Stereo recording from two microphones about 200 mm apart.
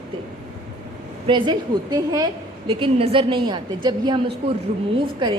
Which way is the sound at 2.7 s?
30° right (ahead or behind).